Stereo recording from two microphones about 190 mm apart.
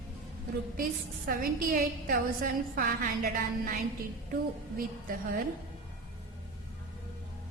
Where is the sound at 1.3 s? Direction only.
50° right (ahead or behind).